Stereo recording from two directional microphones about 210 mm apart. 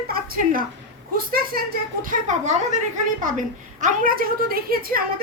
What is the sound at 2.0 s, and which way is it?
A woman's voice, 35° right (ahead or behind).